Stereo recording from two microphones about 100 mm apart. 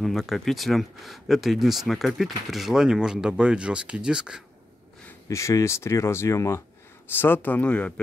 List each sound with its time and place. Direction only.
0.0 s speech: centre (ahead or behind)
5.3 s speech: 30° left (ahead or behind); by 7.9 s 10° left (ahead or behind)